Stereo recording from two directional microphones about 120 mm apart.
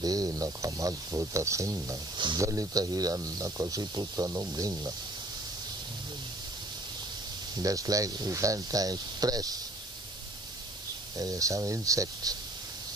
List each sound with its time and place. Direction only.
0.0 s speech: 30° right (ahead or behind)
7.5 s speech: 30° right (ahead or behind)
11.1 s speech: 30° right (ahead or behind)